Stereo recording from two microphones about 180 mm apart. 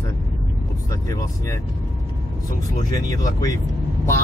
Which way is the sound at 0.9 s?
20° left (ahead or behind).